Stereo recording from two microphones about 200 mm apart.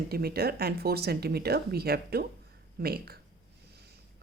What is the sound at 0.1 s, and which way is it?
Speech, 50° right (ahead or behind).